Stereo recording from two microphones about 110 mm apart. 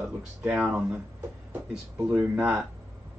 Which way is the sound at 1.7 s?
15° right (ahead or behind).